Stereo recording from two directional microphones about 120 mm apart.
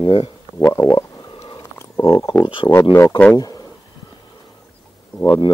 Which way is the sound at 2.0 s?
40° left (ahead or behind).